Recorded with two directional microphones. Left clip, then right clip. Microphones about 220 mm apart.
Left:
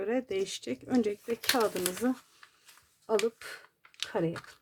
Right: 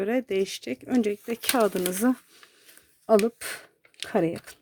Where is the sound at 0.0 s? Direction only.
35° right (ahead or behind).